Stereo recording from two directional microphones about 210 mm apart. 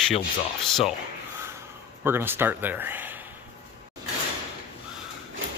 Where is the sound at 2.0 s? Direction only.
10° right (ahead or behind).